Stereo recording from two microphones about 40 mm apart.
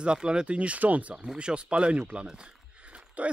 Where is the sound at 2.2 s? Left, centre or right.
Right.